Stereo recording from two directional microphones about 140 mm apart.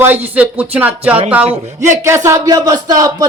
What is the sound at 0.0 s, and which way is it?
Speech, 15° right (ahead or behind).